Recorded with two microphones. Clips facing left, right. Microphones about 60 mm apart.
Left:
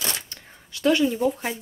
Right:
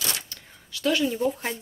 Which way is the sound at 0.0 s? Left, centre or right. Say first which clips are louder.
Left 1 dB; left.